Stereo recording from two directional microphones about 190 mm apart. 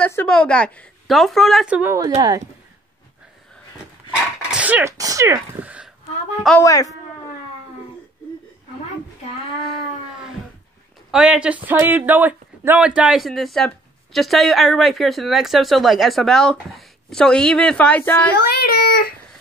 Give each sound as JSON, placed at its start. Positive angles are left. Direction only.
{"t": 0.0, "sound": "speech", "side_deg": 10}
{"t": 1.8, "sound": "speech", "side_deg": -15}
{"t": 4.5, "sound": "speech", "side_deg": -5}
{"t": 6.6, "sound": "a man's voice", "side_deg": 15}
{"t": 11.1, "sound": "speech", "side_deg": -5}
{"t": 18.4, "sound": "a child's voice", "side_deg": 55}